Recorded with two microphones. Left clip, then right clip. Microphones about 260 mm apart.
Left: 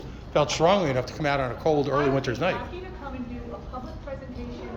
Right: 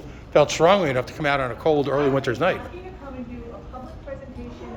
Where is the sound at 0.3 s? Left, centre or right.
Centre.